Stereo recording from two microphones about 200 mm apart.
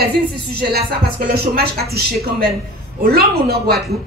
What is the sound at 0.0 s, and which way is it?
A woman's voice, 55° right (ahead or behind).